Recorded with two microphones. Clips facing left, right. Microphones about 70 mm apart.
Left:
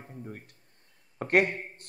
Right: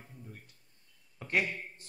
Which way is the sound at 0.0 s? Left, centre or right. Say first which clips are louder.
Left 9 dB; left.